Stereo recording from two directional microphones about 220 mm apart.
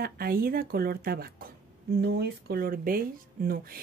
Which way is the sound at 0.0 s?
45° right (ahead or behind).